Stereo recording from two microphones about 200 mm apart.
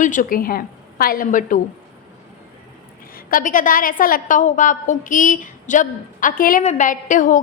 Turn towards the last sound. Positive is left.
turn(degrees=40)  # may be behind; listen again after turning